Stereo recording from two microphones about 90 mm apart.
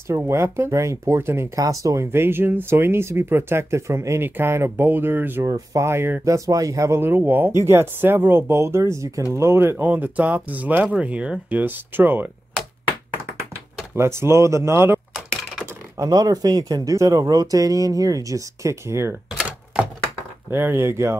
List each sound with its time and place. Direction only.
0.3 s speech: 30° right (ahead or behind)
1.6 s speech: 40° right (ahead or behind)
2.0 s speech: 25° right (ahead or behind)
5.4 s speech: 35° right (ahead or behind)
6.2 s speech: 35° right (ahead or behind); by 12.3 s 20° right (ahead or behind)
13.9 s speech: 30° right (ahead or behind)
16.0 s speech: 45° right (ahead or behind)
19.3 s typewriter: 10° right (ahead or behind)
20.4 s speech: 25° right (ahead or behind)